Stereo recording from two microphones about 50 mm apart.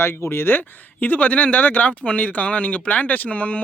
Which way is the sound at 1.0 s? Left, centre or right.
Left.